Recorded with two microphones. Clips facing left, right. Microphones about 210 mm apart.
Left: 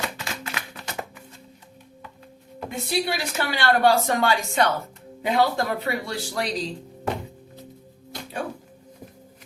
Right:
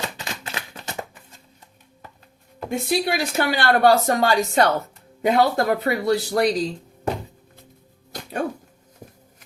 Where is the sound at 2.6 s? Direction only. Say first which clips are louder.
Right 4 dB; 50° right (ahead or behind).